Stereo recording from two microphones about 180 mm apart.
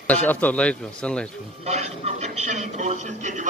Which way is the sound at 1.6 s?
35° right (ahead or behind).